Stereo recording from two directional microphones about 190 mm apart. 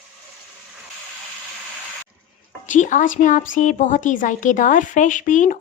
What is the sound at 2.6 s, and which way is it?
A woman's voice, 40° left (ahead or behind).